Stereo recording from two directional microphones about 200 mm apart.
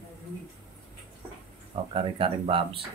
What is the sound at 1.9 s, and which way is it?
Speech, 25° right (ahead or behind).